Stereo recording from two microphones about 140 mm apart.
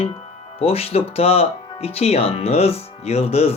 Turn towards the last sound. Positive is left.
turn(degrees=45)  # may be behind; listen again after turning